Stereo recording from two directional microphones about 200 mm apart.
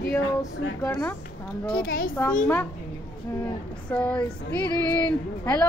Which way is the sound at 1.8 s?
45° left (ahead or behind).